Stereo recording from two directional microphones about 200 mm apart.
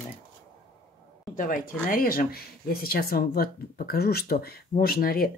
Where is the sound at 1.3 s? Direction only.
40° left (ahead or behind).